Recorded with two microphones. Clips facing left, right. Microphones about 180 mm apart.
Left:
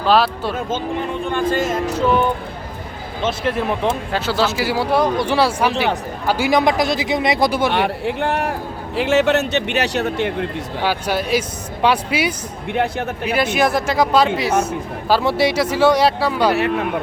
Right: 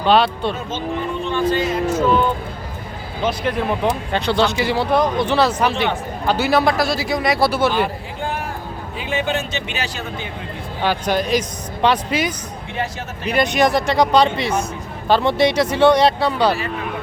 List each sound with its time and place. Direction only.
0.0 s speech: centre (ahead or behind)
1.2 s speech: 50° left (ahead or behind)
3.4 s speech: centre (ahead or behind)
7.7 s speech: 70° left (ahead or behind)
10.8 s speech: 10° left (ahead or behind)
12.7 s speech: 60° left (ahead or behind)
13.2 s speech: 5° left (ahead or behind)
16.6 s speech: 65° left (ahead or behind)